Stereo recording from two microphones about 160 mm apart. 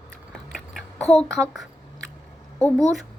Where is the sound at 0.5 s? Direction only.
5° left (ahead or behind).